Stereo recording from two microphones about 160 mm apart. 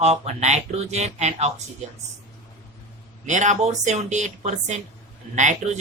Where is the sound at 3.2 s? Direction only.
50° right (ahead or behind).